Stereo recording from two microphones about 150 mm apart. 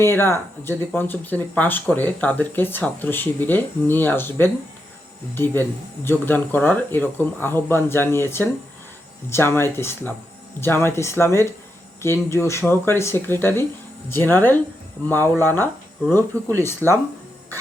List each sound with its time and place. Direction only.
0.0 s speech: 15° left (ahead or behind)